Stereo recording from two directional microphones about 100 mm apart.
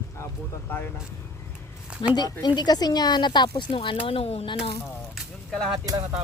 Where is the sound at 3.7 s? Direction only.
65° left (ahead or behind); by 4.4 s 90° left.